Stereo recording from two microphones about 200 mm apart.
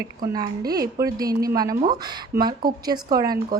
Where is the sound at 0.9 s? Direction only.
20° right (ahead or behind).